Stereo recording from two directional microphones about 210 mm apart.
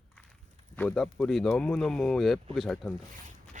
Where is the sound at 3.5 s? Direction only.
35° right (ahead or behind).